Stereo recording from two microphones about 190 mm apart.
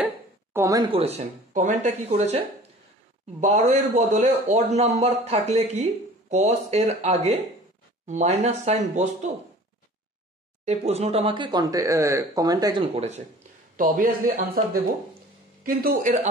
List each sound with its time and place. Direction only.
0.0 s a sound: 10° right (ahead or behind)
0.9 s a man's voice: 35° right (ahead or behind)
10.6 s speech: 35° right (ahead or behind)
13.7 s speech: 45° right (ahead or behind)